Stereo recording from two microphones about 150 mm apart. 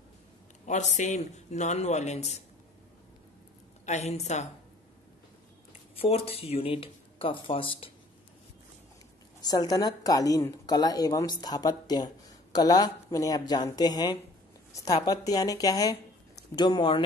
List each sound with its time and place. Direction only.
0.7 s a man's voice: 55° left (ahead or behind)
3.8 s a man's voice: 45° left (ahead or behind)
5.7 s speech: 40° left (ahead or behind)
9.4 s a woman's voice: 25° left (ahead or behind)